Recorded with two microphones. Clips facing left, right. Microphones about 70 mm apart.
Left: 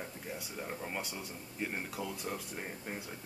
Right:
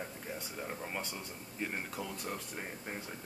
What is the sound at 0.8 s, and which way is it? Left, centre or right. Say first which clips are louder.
Speech: even; centre.